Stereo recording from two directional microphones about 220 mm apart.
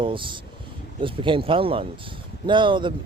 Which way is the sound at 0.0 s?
25° right (ahead or behind).